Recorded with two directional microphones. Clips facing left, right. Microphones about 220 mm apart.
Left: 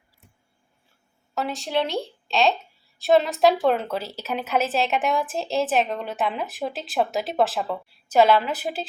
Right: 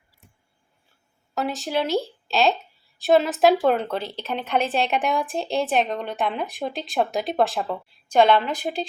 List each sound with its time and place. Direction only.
1.4 s a woman's voice: centre (ahead or behind)